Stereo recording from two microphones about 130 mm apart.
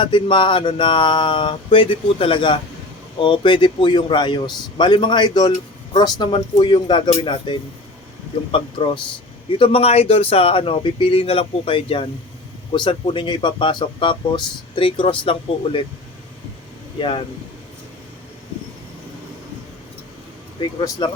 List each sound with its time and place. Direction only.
0.0 s speech: 40° left (ahead or behind)
17.0 s speech: 45° left (ahead or behind)
20.6 s speech: 35° left (ahead or behind)